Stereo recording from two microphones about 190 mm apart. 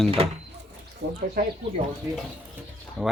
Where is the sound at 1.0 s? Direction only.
80° right.